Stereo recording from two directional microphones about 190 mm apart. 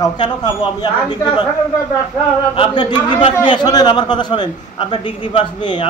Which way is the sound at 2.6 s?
25° left (ahead or behind).